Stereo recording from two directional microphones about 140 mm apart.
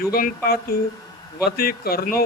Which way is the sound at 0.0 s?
90° left.